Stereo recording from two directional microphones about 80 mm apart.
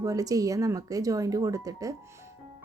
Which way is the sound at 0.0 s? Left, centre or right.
Right.